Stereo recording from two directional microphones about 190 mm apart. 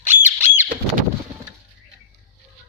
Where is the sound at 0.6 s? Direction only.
45° right (ahead or behind).